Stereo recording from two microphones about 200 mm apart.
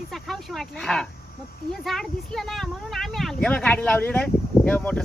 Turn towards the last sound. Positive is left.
turn(degrees=5)  # may be behind; listen again after turning